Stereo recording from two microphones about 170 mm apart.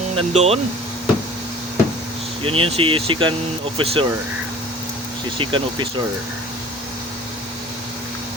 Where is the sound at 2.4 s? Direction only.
35° right (ahead or behind).